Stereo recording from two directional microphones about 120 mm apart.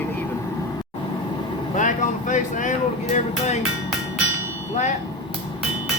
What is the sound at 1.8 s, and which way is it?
Speech, 90° left.